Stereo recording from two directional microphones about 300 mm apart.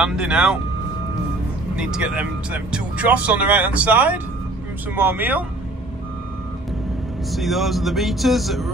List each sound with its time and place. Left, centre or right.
0.0 s speech: centre
1.8 s speech: centre
7.2 s speech: centre